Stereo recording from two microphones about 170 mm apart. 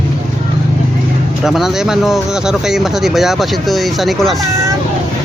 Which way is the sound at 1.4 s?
Centre (ahead or behind).